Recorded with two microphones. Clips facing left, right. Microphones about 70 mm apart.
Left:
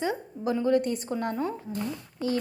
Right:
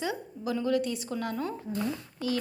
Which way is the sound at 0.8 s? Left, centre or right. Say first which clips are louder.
Left 3 dB; left.